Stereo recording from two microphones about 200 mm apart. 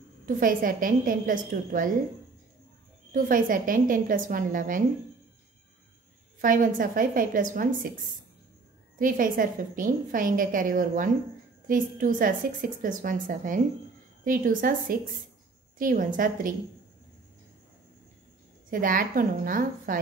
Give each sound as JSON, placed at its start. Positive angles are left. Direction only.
{"t": 0.3, "sound": "a woman's voice", "side_deg": -45}
{"t": 3.1, "sound": "a woman's voice", "side_deg": -45}
{"t": 6.4, "sound": "a woman's voice", "side_deg": -45}
{"t": 8.9, "sound": "a woman's voice", "side_deg": -45}
{"t": 18.7, "sound": "a woman's voice", "side_deg": -45}